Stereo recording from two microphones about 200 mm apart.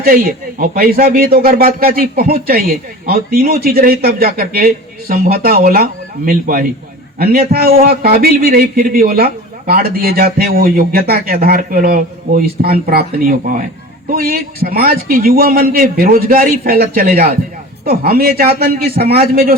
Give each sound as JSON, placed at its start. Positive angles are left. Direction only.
{"t": 0.0, "sound": "a man's voice", "side_deg": -45}